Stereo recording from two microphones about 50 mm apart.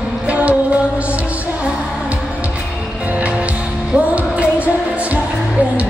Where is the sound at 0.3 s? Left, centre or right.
Right.